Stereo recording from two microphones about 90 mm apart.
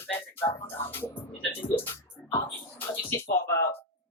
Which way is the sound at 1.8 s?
25° left (ahead or behind).